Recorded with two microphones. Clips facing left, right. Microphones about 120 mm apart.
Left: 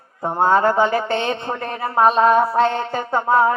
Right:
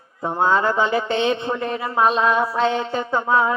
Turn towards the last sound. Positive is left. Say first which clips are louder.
# left 3 dB
turn(degrees=40)  # may be behind; listen again after turning